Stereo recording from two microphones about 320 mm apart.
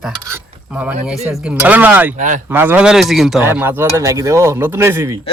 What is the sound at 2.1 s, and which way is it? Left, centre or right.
Speech, right.